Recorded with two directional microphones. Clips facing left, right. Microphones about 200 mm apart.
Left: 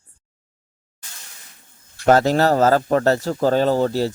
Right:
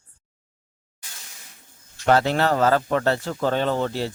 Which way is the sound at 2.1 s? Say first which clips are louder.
Left 4 dB; 40° left (ahead or behind).